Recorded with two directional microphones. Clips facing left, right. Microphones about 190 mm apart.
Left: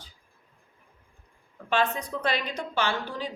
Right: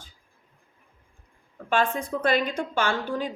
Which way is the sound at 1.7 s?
50° right (ahead or behind).